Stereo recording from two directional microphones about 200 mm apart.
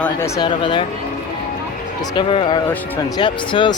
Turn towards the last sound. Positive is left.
turn(degrees=25)  # may be behind; listen again after turning